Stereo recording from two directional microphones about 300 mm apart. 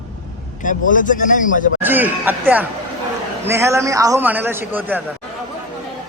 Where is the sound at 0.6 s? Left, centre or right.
Left.